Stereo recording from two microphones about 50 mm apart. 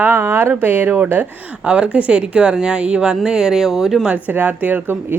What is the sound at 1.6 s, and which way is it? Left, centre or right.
Speech, right.